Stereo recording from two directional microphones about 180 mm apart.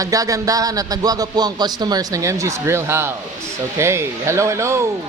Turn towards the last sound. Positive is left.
turn(degrees=-15)  # may be behind; listen again after turning